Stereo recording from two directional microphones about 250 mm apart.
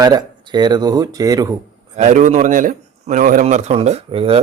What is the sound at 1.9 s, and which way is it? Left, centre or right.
A man's voice, right.